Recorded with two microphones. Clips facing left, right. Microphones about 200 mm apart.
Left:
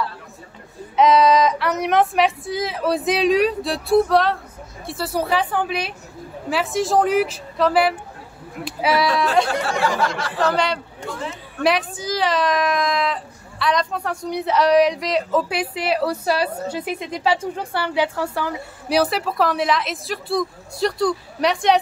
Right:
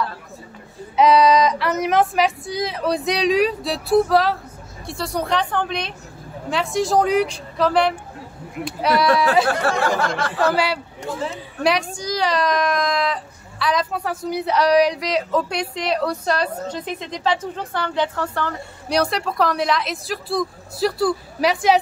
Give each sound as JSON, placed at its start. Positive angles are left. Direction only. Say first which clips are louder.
{"t": 0.9, "sound": "a woman's voice", "louder": "even", "side_deg": 0}
{"t": 9.5, "sound": "a sound", "louder": "right 2 dB", "side_deg": -55}
{"t": 10.5, "sound": "speech", "louder": "even", "side_deg": -5}